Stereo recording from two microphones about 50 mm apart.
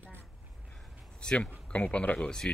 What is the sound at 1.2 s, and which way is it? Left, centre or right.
Speech, centre.